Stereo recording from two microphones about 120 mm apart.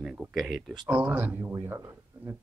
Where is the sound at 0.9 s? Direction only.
15° right (ahead or behind).